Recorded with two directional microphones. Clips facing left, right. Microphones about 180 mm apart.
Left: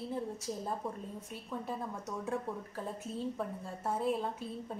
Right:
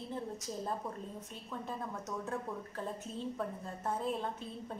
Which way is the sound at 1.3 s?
10° left (ahead or behind).